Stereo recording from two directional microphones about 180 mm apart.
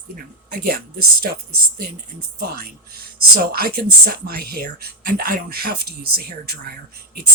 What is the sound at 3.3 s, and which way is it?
Speech, 55° right (ahead or behind).